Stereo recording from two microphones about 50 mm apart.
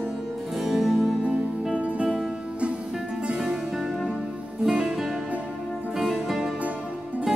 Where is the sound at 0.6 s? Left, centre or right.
Centre.